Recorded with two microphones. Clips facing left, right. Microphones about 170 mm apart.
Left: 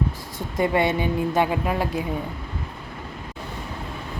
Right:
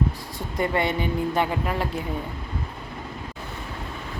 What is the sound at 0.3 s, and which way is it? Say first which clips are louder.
A woman's voice: left 3 dB; 20° left (ahead or behind).